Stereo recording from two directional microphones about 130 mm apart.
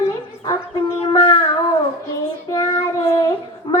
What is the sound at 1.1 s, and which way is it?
Child singing, 35° left (ahead or behind).